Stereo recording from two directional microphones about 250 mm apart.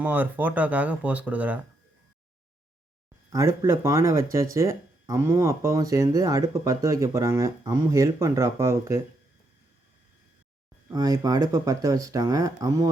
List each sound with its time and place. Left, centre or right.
0.0 s speech: centre
3.2 s speech: centre
10.8 s speech: centre